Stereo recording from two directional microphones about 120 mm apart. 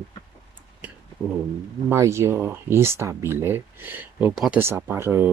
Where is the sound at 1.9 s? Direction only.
25° right (ahead or behind).